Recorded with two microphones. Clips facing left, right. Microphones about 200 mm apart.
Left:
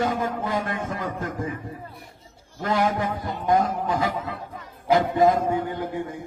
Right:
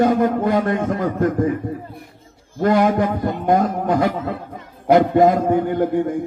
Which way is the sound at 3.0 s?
50° right (ahead or behind).